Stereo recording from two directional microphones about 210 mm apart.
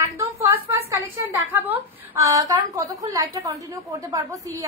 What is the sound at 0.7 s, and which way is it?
A woman's voice, 10° right (ahead or behind).